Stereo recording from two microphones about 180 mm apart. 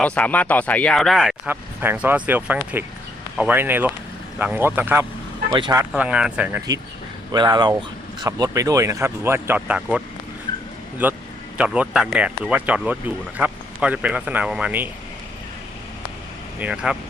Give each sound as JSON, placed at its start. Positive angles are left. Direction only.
{"t": 0.0, "sound": "speech", "side_deg": 10}
{"t": 5.5, "sound": "speech", "side_deg": -25}
{"t": 5.9, "sound": "speech", "side_deg": -5}
{"t": 7.3, "sound": "speech", "side_deg": -25}
{"t": 11.0, "sound": "speech", "side_deg": -10}
{"t": 16.6, "sound": "speech", "side_deg": -5}